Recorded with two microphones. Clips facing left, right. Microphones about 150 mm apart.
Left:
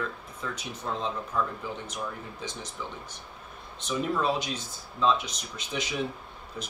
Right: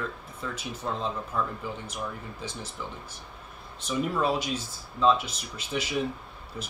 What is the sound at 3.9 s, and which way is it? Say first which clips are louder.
Speech: right 1 dB; 5° right (ahead or behind).